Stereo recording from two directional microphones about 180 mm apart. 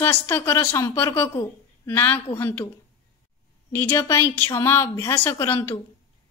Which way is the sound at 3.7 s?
15° left (ahead or behind).